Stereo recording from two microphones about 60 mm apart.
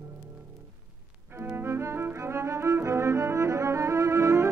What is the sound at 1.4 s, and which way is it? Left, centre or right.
Music, right.